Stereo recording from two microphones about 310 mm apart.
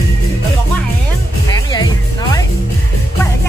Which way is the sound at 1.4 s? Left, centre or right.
Centre.